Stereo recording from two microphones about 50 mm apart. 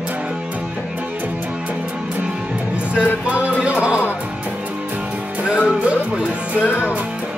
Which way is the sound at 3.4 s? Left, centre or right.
Right.